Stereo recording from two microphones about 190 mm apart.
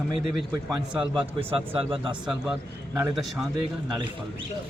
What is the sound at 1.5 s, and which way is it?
Speech, 30° right (ahead or behind).